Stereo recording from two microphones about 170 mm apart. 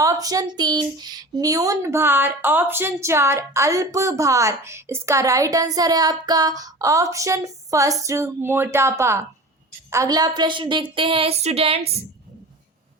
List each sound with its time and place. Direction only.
0.0 s speech: 20° right (ahead or behind); by 11.8 s 35° right (ahead or behind)